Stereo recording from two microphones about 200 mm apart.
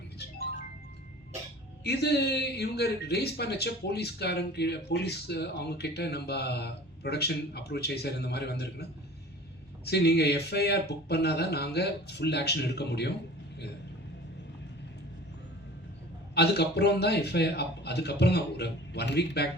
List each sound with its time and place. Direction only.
1.8 s a man's voice: 55° left (ahead or behind)
16.3 s a man's voice: 55° left (ahead or behind)